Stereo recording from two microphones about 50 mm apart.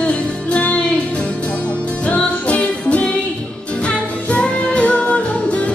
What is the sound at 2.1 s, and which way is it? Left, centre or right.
Music, left.